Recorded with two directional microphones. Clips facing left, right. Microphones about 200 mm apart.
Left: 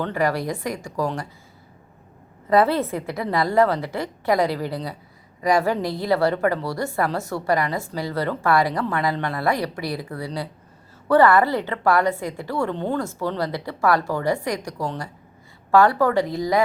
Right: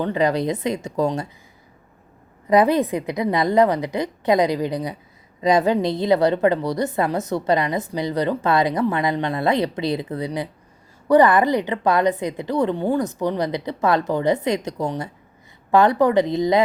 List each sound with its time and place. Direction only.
0.0 s a woman's voice: 20° right (ahead or behind)
2.5 s a woman's voice: 15° right (ahead or behind)